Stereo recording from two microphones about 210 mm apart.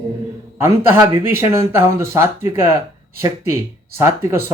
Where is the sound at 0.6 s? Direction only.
15° right (ahead or behind).